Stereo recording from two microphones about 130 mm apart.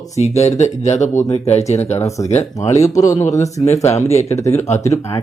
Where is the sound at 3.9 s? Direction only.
55° left (ahead or behind).